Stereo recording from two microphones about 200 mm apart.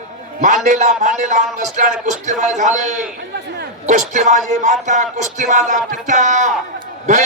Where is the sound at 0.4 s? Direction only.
40° right (ahead or behind).